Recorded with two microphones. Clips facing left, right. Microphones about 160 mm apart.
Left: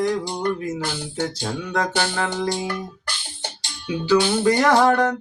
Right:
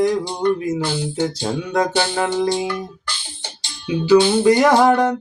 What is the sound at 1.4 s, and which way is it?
Music, 15° right (ahead or behind).